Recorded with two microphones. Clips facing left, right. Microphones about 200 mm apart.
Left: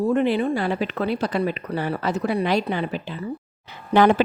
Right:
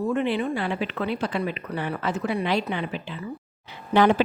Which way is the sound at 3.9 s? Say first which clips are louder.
Left 2 dB; 50° left (ahead or behind).